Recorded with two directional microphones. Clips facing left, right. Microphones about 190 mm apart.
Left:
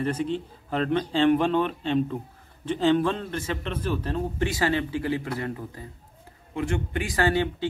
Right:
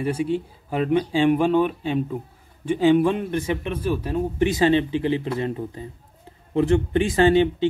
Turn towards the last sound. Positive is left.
turn(degrees=-20)  # may be behind; listen again after turning